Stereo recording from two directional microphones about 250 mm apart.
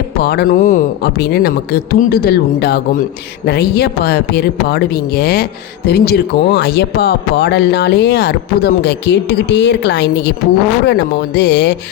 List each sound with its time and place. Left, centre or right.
0.2 s a woman's voice: left